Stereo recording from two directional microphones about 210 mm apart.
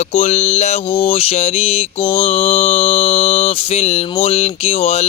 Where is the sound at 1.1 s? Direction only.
30° left (ahead or behind).